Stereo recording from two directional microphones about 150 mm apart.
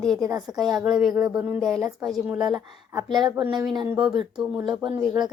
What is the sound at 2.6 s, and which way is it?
Speech, 25° right (ahead or behind).